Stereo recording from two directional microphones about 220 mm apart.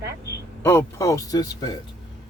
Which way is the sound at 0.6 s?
10° left (ahead or behind).